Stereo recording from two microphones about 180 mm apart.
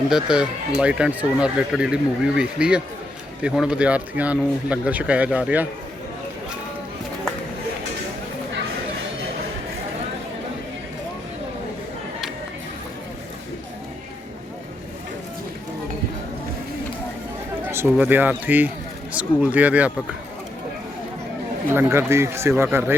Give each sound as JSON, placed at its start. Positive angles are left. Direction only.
{"t": 0.1, "sound": "speech", "side_deg": -5}
{"t": 17.7, "sound": "speech", "side_deg": -10}
{"t": 21.7, "sound": "speech", "side_deg": -15}